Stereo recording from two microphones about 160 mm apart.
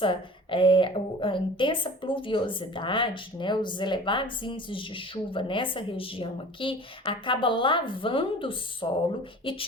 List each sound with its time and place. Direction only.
0.0 s a woman's voice: 30° left (ahead or behind)